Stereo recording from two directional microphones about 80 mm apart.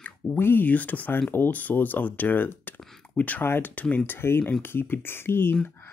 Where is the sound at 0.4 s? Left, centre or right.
Left.